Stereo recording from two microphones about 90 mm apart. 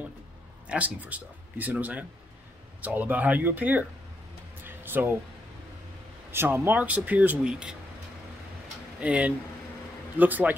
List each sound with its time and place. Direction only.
0.7 s a man's voice: 15° right (ahead or behind)
4.6 s a sound: 25° right (ahead or behind)
6.3 s a man's voice: 25° right (ahead or behind)
9.0 s a man's voice: 15° right (ahead or behind)